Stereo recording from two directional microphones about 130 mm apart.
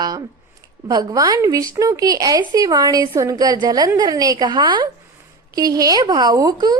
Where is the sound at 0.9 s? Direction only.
30° right (ahead or behind).